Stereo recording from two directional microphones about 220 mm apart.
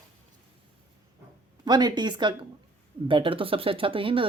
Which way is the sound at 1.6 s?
20° right (ahead or behind).